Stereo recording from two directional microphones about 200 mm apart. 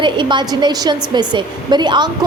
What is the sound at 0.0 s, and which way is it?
A woman's voice, 25° right (ahead or behind).